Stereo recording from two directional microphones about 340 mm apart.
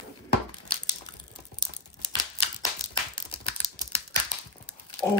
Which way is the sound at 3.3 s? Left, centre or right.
Centre.